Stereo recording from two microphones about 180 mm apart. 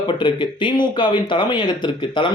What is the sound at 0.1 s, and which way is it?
Speech, 25° left (ahead or behind).